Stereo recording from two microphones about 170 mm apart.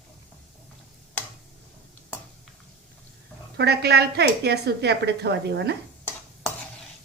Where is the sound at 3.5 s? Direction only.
75° right (ahead or behind).